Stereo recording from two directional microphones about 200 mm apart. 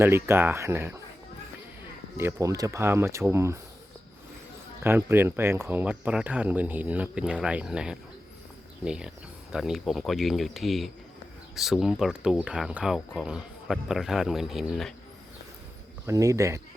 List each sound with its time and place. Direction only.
0.0 s speech: 10° right (ahead or behind)
2.1 s speech: 15° right (ahead or behind)
4.8 s speech: 10° right (ahead or behind)
16.0 s speech: 15° right (ahead or behind)